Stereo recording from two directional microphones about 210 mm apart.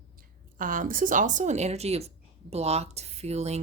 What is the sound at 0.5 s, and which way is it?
Speech, 40° right (ahead or behind).